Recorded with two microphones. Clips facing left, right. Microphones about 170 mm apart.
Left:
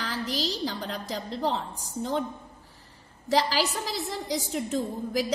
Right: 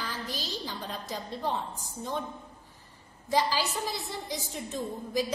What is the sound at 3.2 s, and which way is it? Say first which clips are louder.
A woman's voice: left 3 dB; 90° left.